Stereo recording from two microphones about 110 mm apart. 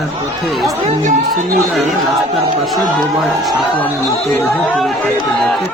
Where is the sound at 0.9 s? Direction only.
90° right.